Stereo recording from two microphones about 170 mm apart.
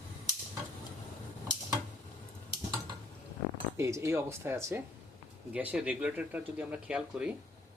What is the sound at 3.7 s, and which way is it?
Speech, 15° right (ahead or behind).